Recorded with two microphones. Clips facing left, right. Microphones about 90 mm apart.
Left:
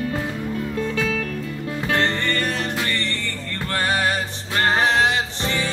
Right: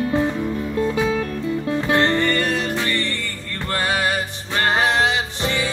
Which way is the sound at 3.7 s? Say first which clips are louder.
Even; 15° right (ahead or behind).